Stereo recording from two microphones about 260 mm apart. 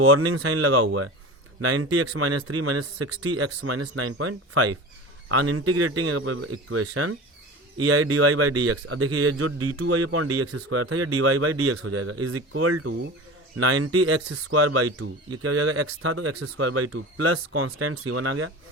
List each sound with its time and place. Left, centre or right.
0.0 s speech: right